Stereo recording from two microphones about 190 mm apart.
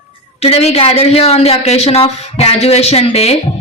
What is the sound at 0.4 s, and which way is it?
A woman's voice, 30° left (ahead or behind).